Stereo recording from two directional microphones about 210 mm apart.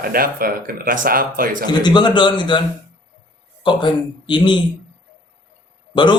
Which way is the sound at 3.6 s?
20° left (ahead or behind).